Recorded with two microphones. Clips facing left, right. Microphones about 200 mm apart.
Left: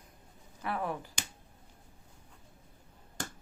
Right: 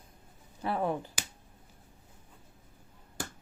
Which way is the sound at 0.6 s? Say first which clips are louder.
Right 4 dB; 30° right (ahead or behind).